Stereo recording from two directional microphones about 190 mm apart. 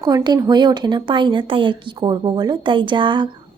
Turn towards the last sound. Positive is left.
turn(degrees=-25)  # may be behind; listen again after turning